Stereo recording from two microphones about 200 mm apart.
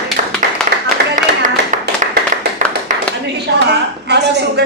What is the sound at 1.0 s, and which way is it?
Music, 55° right (ahead or behind).